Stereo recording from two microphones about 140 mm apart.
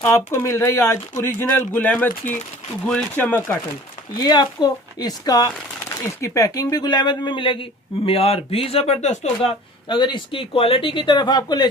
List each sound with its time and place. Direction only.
0.0 s speech: 20° left (ahead or behind)
4.2 s a woman's voice: 30° left (ahead or behind)